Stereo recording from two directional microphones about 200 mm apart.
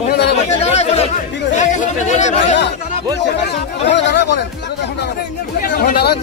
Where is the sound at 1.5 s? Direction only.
35° left (ahead or behind).